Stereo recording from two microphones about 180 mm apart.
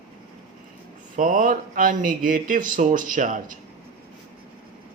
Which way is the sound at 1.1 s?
45° right (ahead or behind).